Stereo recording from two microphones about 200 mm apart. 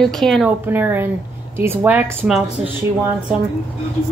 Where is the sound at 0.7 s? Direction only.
10° right (ahead or behind).